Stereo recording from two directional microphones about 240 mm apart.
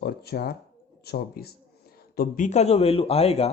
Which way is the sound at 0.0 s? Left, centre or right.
Left.